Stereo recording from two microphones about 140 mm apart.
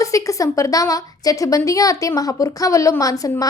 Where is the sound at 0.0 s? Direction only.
25° left (ahead or behind).